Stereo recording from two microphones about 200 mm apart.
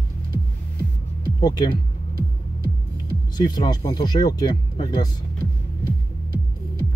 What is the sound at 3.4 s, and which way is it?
Speech, 20° left (ahead or behind).